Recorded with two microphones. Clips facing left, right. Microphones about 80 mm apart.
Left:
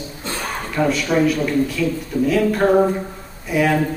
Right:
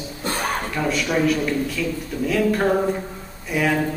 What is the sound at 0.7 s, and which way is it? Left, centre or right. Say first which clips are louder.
A man's voice: left 6 dB; centre.